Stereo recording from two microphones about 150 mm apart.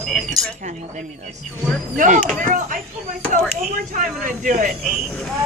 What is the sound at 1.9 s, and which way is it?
Speech, 60° right (ahead or behind).